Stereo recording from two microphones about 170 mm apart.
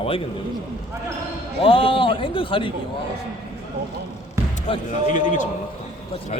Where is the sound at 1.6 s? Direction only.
30° left (ahead or behind).